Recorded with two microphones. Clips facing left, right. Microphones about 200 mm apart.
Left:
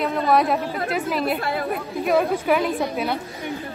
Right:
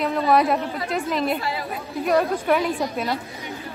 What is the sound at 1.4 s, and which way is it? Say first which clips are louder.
Speech: left 4 dB; 55° left (ahead or behind).